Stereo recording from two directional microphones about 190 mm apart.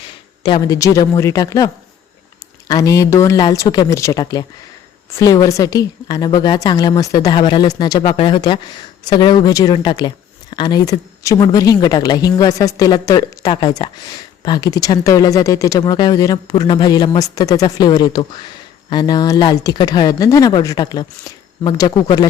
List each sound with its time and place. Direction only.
0.4 s speech: 20° left (ahead or behind)